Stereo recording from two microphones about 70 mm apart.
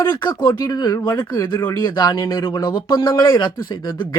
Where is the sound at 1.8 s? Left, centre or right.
Left.